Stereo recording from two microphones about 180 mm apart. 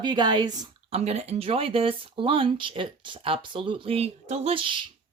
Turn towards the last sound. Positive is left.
turn(degrees=-30)  # may be behind; listen again after turning